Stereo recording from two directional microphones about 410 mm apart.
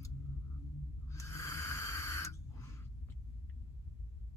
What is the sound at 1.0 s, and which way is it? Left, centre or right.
Snort, centre.